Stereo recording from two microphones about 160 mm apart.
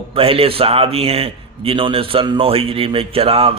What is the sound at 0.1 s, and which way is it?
A man's voice, 35° right (ahead or behind).